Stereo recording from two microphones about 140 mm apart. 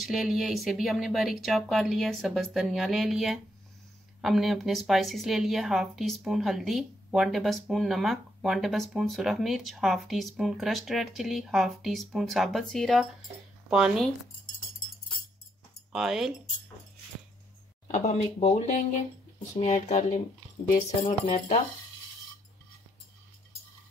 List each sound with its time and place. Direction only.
0.0 s a woman's voice: centre (ahead or behind)
15.9 s a woman's voice: 5° right (ahead or behind)
17.9 s speech: 55° left (ahead or behind)